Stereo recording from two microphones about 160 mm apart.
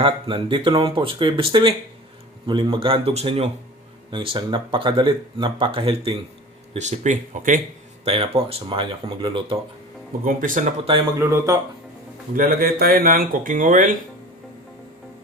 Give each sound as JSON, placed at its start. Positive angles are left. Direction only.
{"t": 0.0, "sound": "speech", "side_deg": -35}
{"t": 6.7, "sound": "speech", "side_deg": -45}
{"t": 8.0, "sound": "speech", "side_deg": -40}
{"t": 10.2, "sound": "speech", "side_deg": -60}
{"t": 11.2, "sound": "speech", "side_deg": -15}
{"t": 12.3, "sound": "speech", "side_deg": -65}